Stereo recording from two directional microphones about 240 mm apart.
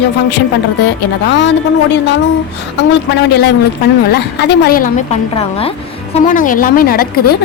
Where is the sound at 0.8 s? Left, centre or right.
Left.